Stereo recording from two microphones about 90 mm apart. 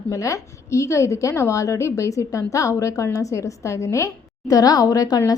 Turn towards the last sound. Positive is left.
turn(degrees=45)  # may be behind; listen again after turning